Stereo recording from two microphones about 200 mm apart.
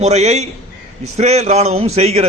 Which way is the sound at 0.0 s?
35° right (ahead or behind).